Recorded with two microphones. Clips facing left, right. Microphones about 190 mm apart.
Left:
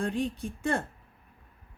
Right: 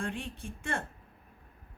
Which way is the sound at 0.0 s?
35° left (ahead or behind).